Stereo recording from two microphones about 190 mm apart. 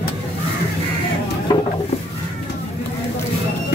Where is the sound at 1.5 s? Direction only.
25° left (ahead or behind).